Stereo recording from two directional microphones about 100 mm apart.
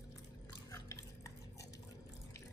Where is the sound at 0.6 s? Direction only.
35° left (ahead or behind).